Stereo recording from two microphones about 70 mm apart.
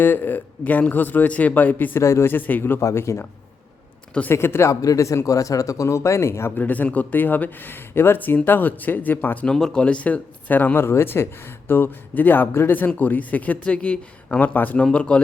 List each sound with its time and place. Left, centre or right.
0.0 s speech: left
2.0 s speech: left
2.3 s speech: left
2.8 s speech: left
4.3 s speech: left
4.8 s a man's voice: left
6.6 s speech: left
9.5 s speech: centre
14.3 s speech: left